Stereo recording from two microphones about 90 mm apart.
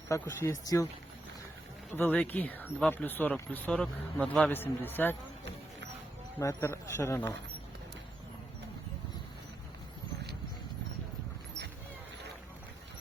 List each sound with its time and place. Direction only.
0.1 s a man's voice: 35° left (ahead or behind)
2.0 s speech: 20° left (ahead or behind)
4.5 s speech: 20° left (ahead or behind)
6.4 s a man's voice: 30° left (ahead or behind)